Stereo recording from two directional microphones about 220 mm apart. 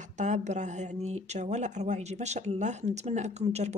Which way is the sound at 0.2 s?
30° right (ahead or behind).